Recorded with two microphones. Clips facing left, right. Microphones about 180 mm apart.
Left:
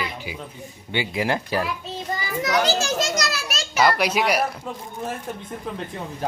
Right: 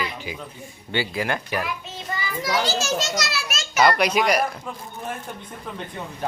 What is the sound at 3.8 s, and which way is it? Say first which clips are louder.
Speech: right 1 dB; 5° left (ahead or behind).